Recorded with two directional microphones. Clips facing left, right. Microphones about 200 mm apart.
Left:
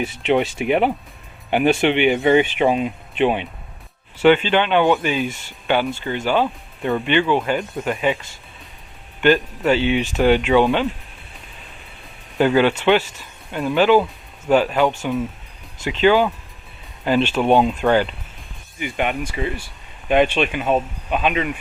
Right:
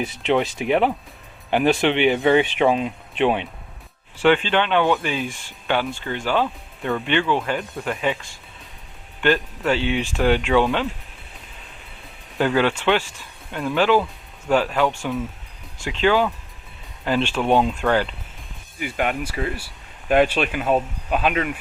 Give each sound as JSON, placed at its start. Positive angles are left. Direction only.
{"t": 0.0, "sound": "speech", "side_deg": 5}
{"t": 6.4, "sound": "speech", "side_deg": 20}
{"t": 7.0, "sound": "speech", "side_deg": 5}
{"t": 12.4, "sound": "speech", "side_deg": 5}